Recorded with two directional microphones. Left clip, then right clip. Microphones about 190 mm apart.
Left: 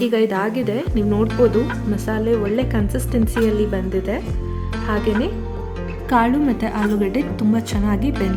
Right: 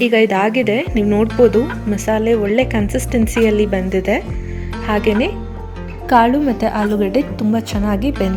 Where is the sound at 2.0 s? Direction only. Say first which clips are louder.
Right 9 dB; 15° right (ahead or behind).